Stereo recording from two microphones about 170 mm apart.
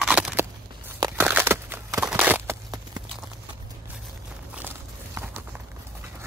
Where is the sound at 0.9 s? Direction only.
20° right (ahead or behind).